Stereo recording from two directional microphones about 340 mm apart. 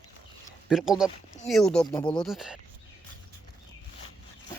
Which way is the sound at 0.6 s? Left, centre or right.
Centre.